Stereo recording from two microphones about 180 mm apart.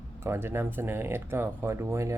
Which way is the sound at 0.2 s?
15° right (ahead or behind).